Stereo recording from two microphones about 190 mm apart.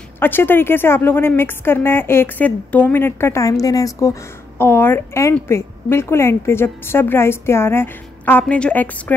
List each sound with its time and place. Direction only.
0.2 s a woman's voice: 10° left (ahead or behind)